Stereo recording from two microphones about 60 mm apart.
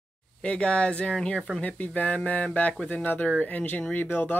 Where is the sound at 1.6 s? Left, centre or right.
Left.